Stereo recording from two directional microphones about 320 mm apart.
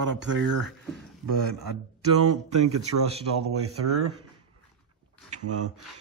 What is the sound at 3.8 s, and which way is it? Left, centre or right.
Speech, right.